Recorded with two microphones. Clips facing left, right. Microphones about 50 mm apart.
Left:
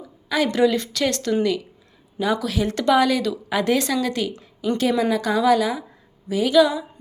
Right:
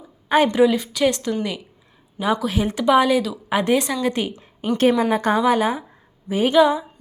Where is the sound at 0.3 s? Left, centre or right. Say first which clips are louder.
Right 5 dB; right.